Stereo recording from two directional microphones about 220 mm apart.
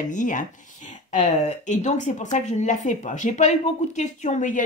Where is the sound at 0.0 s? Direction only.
35° left (ahead or behind).